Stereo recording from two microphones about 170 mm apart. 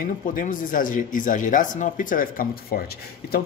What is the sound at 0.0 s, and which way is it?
Speech, 55° left (ahead or behind).